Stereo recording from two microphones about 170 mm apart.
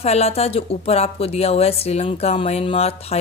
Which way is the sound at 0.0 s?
40° left (ahead or behind).